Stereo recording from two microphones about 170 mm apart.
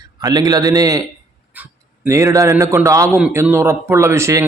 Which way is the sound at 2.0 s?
20° right (ahead or behind).